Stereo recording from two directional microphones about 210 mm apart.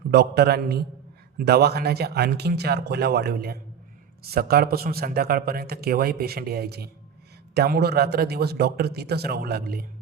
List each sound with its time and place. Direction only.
0.1 s speech: 50° right (ahead or behind)